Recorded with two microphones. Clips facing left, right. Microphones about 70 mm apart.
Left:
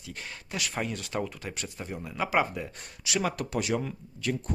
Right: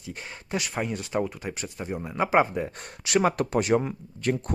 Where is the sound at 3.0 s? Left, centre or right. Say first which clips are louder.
Right 7 dB; right.